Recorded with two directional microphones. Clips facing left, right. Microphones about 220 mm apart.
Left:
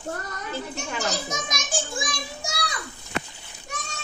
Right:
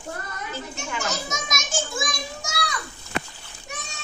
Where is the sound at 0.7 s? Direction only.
35° left (ahead or behind).